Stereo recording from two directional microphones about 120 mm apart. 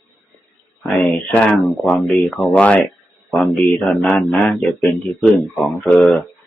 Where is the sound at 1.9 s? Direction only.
5° left (ahead or behind).